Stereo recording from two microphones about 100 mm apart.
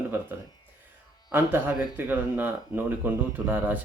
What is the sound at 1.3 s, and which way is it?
Speech, 20° right (ahead or behind).